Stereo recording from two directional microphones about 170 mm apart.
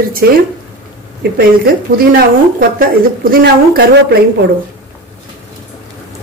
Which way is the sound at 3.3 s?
65° right (ahead or behind).